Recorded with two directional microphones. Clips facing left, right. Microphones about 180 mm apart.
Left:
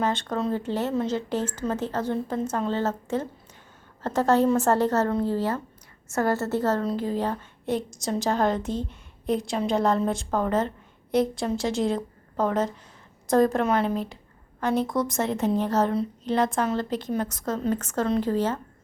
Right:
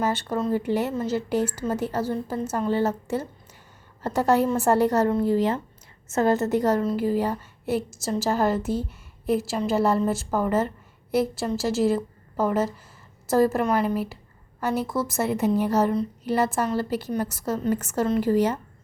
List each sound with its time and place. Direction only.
0.0 s a woman's voice: 10° right (ahead or behind)